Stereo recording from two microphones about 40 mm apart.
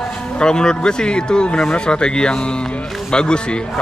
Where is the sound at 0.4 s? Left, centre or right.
Centre.